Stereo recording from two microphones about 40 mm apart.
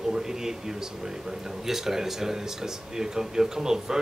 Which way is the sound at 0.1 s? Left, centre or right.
Centre.